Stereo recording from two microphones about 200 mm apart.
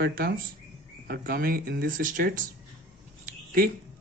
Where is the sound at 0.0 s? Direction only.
50° right (ahead or behind).